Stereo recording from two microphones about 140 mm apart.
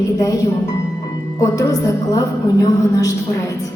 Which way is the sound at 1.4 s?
25° left (ahead or behind).